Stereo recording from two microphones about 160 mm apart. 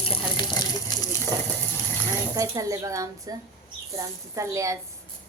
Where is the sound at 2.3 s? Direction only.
20° right (ahead or behind).